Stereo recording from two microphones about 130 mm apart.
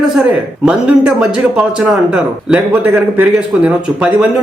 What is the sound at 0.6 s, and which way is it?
A man's voice, 10° right (ahead or behind).